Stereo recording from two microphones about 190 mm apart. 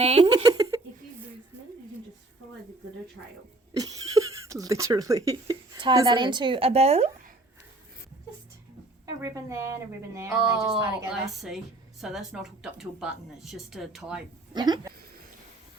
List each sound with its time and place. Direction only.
0.4 s a sound: 20° right (ahead or behind)
3.8 s speech: 20° right (ahead or behind); by 7.1 s 35° right (ahead or behind)
9.0 s speech: 15° right (ahead or behind)
10.7 s a woman's voice: centre (ahead or behind)
14.5 s speech: 20° right (ahead or behind)